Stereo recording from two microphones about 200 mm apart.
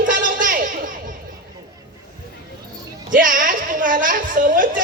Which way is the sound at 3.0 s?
40° right (ahead or behind).